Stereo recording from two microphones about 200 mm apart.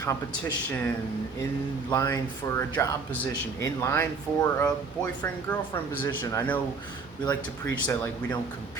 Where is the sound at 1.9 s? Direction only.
15° left (ahead or behind).